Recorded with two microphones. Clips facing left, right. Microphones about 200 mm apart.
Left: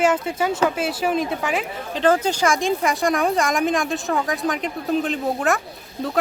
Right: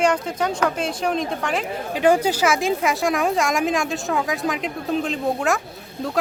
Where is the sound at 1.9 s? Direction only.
10° right (ahead or behind).